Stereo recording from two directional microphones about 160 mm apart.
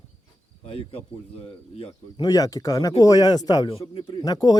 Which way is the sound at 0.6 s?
35° left (ahead or behind).